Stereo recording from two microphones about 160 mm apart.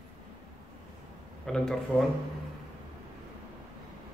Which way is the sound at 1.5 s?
5° left (ahead or behind).